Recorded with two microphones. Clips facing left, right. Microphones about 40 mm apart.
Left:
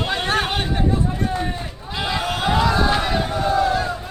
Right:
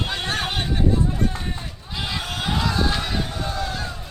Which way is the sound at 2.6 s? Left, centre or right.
Centre.